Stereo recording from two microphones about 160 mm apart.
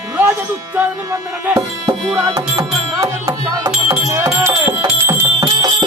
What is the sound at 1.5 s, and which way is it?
Music, 20° right (ahead or behind).